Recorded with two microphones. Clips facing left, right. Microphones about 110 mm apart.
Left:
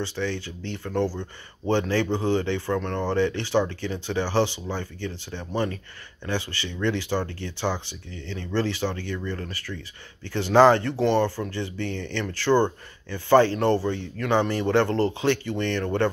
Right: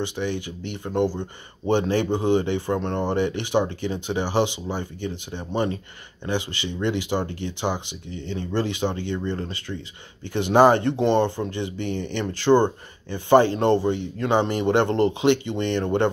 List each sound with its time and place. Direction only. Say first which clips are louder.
0.0 s speech: right 2 dB; 15° right (ahead or behind)